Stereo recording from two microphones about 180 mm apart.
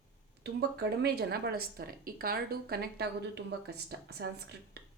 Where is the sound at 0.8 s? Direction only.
60° right (ahead or behind).